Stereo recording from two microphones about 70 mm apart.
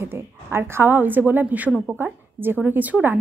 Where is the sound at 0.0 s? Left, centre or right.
Right.